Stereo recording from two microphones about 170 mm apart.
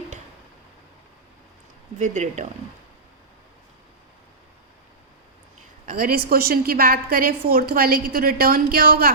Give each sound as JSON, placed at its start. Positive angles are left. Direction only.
{"t": 2.0, "sound": "speech", "side_deg": -45}
{"t": 5.9, "sound": "a woman's voice", "side_deg": -55}